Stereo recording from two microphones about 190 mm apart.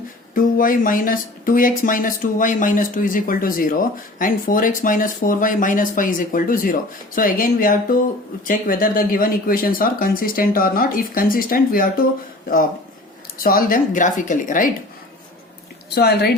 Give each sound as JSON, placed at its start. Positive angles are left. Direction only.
{"t": 0.3, "sound": "speech", "side_deg": 45}
{"t": 13.4, "sound": "speech", "side_deg": 50}
{"t": 16.0, "sound": "a woman's voice", "side_deg": 55}